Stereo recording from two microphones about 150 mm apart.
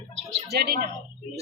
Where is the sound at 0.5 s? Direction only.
90° right.